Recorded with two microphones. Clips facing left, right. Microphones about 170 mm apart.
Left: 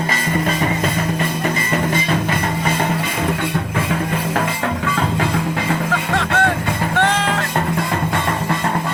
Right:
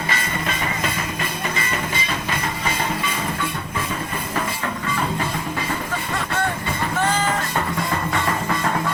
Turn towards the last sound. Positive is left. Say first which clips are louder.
# left 3 dB
turn(degrees=75)  # may be behind; listen again after turning